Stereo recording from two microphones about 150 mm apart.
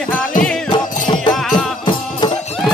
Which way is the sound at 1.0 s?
30° left (ahead or behind).